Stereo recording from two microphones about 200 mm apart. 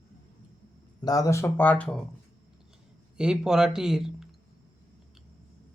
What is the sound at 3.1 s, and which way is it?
Speech, 5° right (ahead or behind).